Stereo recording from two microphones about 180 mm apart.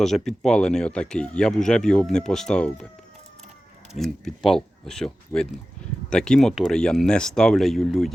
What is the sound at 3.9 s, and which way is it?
Speech, centre (ahead or behind).